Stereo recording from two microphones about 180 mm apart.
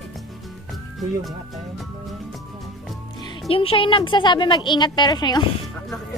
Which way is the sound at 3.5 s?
30° left (ahead or behind).